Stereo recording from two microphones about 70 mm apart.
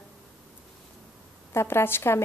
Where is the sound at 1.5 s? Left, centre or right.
Left.